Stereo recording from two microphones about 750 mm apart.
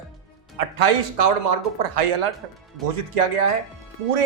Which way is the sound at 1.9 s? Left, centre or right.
Right.